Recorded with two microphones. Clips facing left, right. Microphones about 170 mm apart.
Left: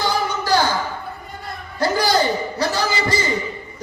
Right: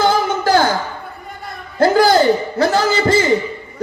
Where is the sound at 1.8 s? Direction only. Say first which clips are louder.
Right 7 dB; 50° right (ahead or behind).